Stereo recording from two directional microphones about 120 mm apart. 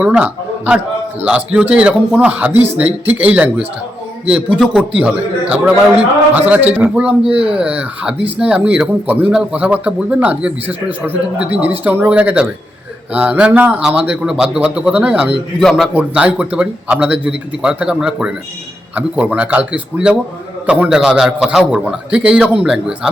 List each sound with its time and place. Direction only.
0.0 s a sound: 10° right (ahead or behind)
1.2 s speech: 10° right (ahead or behind)
4.5 s speech: 5° right (ahead or behind)
7.3 s speech: 50° right (ahead or behind)
7.6 s speech: 10° right (ahead or behind)
15.6 s speech: centre (ahead or behind)